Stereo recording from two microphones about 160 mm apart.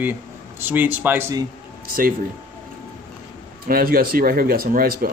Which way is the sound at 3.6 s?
65° right (ahead or behind).